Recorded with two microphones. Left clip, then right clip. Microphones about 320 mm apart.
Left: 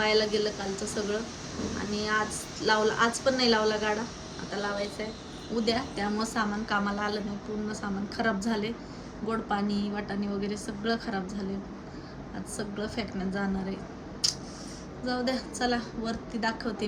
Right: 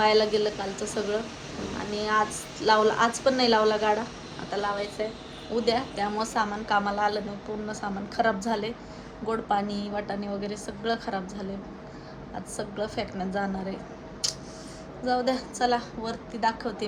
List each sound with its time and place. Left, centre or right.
0.0 s a woman's voice: centre
12.5 s a woman's voice: centre
14.2 s scissors: centre
15.0 s a woman's voice: centre